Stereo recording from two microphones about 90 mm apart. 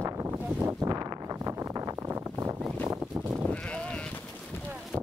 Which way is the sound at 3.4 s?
10° left (ahead or behind).